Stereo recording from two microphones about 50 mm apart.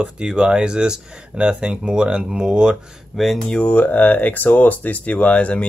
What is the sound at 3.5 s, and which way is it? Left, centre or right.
Speech, left.